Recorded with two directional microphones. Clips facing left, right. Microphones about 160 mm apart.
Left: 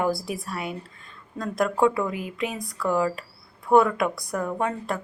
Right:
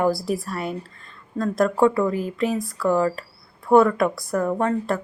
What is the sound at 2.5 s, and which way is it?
Speech, centre (ahead or behind).